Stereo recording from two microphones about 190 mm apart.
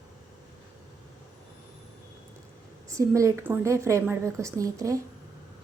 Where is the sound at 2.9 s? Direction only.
15° right (ahead or behind).